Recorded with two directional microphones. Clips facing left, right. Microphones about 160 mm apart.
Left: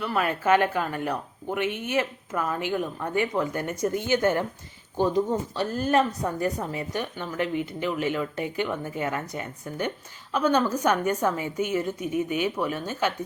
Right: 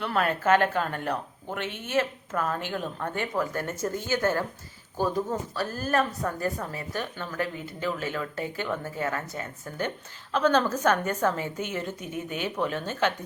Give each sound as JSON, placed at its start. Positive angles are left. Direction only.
{"t": 0.0, "sound": "speech", "side_deg": 5}